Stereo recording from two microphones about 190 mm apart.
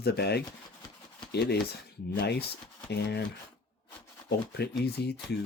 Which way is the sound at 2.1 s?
60° left (ahead or behind).